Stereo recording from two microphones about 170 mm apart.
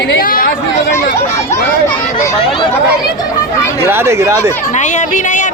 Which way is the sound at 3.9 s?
15° right (ahead or behind).